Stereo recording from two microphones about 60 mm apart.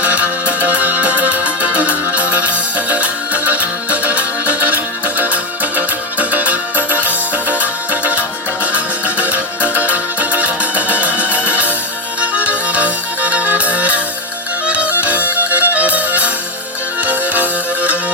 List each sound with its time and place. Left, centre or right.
0.0 s music: right